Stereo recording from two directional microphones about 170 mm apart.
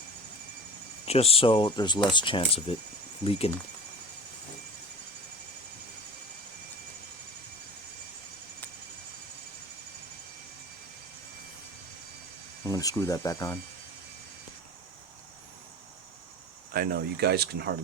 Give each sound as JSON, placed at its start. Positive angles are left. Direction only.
{"t": 1.0, "sound": "speech", "side_deg": 35}
{"t": 12.6, "sound": "speech", "side_deg": 20}
{"t": 16.7, "sound": "speech", "side_deg": -60}